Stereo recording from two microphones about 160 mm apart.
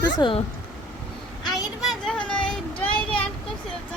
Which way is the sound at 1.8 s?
Centre (ahead or behind).